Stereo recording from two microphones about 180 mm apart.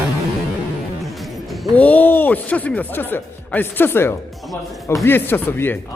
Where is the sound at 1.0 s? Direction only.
Centre (ahead or behind).